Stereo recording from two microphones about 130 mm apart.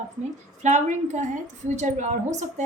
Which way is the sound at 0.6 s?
65° right (ahead or behind).